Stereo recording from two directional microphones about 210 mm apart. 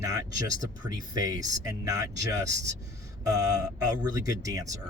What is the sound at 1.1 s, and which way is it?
Speech, 15° right (ahead or behind).